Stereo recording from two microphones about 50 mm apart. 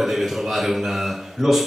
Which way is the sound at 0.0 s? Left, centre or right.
Centre.